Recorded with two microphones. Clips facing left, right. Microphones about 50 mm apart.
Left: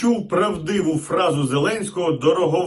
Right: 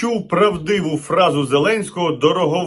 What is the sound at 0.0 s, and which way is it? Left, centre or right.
A man's voice, right.